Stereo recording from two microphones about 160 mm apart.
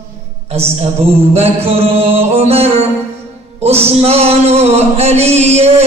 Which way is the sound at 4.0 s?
40° right (ahead or behind).